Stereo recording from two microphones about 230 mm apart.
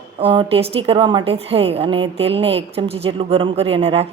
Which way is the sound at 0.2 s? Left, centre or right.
Right.